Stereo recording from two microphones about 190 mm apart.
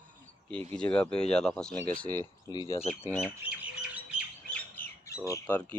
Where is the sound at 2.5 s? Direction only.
25° left (ahead or behind).